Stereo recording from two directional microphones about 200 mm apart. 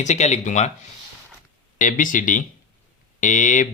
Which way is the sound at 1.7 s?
40° left (ahead or behind).